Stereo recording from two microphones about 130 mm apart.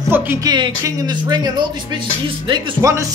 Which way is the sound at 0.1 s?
15° right (ahead or behind).